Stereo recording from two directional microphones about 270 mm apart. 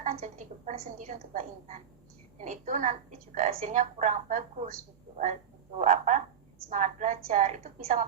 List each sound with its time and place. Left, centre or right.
0.0 s a woman's voice: right